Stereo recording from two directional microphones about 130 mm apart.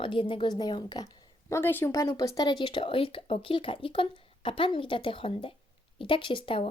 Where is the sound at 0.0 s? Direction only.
40° left (ahead or behind).